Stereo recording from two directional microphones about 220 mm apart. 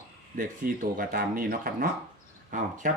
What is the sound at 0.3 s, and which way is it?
Speech, 40° right (ahead or behind).